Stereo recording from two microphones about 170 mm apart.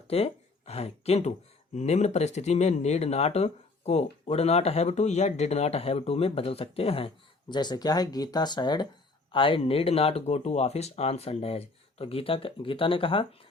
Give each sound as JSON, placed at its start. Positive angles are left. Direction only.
{"t": 0.1, "sound": "speech", "side_deg": 35}